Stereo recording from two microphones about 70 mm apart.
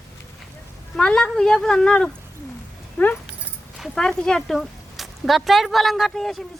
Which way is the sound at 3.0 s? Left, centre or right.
Left.